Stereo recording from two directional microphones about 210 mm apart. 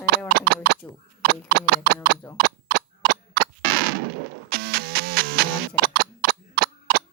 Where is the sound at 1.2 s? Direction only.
45° right (ahead or behind).